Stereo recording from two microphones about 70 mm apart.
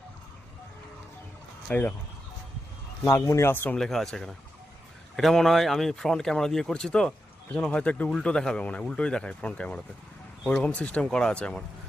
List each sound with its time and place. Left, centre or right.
1.7 s speech: left
3.2 s speech: left
3.5 s speech: left
3.8 s speech: centre
5.1 s speech: centre